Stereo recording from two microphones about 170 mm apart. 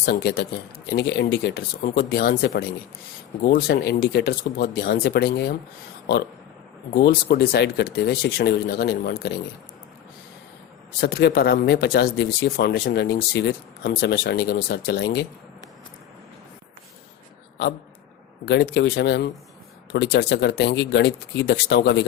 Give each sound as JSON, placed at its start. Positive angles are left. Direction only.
{"t": 0.0, "sound": "speech", "side_deg": 75}
{"t": 6.9, "sound": "speech", "side_deg": 70}
{"t": 11.0, "sound": "speech", "side_deg": 70}
{"t": 18.4, "sound": "speech", "side_deg": 85}